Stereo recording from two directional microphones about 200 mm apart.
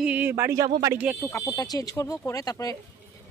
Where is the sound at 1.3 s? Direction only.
15° left (ahead or behind).